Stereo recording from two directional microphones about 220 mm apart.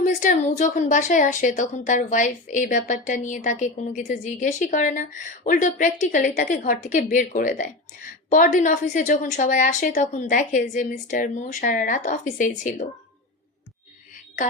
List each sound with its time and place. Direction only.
0.0 s a woman's voice: 35° left (ahead or behind)